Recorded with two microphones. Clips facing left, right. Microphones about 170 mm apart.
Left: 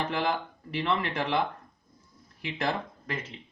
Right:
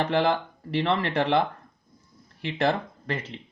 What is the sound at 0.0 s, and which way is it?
Speech, 35° right (ahead or behind).